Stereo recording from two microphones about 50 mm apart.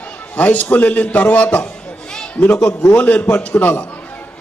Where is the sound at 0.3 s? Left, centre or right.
Left.